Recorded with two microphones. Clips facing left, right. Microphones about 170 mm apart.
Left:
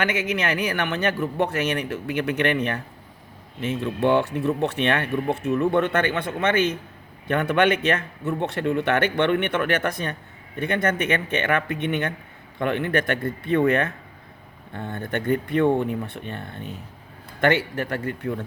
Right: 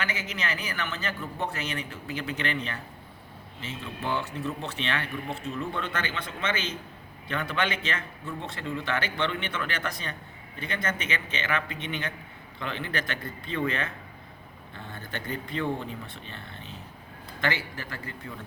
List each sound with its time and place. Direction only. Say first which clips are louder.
0.0 s a man's voice: left 9 dB; 65° left (ahead or behind)